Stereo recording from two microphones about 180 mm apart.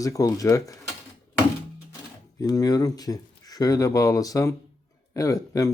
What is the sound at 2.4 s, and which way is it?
Speech, 20° left (ahead or behind).